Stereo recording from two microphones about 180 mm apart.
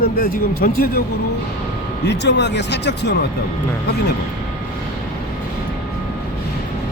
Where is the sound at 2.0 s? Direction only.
75° left (ahead or behind).